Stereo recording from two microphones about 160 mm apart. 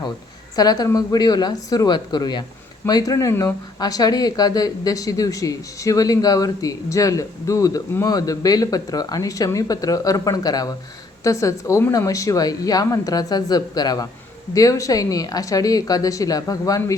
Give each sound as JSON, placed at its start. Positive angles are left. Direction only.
{"t": 0.5, "sound": "speech", "side_deg": 25}